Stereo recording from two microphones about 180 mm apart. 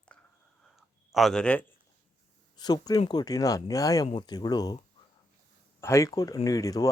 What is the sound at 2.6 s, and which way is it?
Speech, 20° left (ahead or behind).